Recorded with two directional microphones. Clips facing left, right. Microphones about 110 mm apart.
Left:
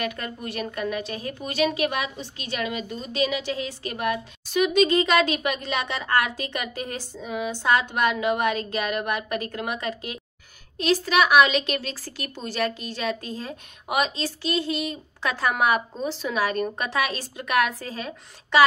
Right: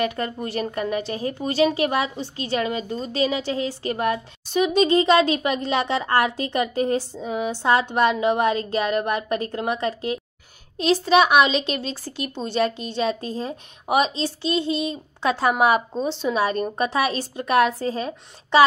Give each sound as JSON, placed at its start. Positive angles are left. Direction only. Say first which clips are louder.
{"t": 0.0, "sound": "a woman's voice", "louder": "right 5 dB", "side_deg": -30}